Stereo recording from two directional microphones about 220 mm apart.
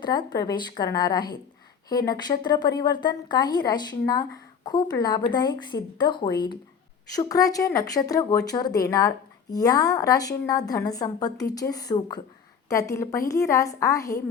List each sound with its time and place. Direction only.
0.0 s a woman's voice: 20° left (ahead or behind)